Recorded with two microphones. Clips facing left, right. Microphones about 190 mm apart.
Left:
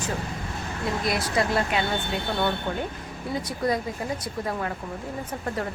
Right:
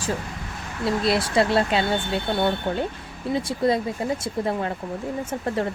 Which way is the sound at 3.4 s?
25° right (ahead or behind).